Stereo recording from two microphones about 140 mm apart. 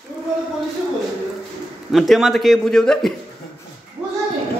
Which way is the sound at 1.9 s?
Centre (ahead or behind).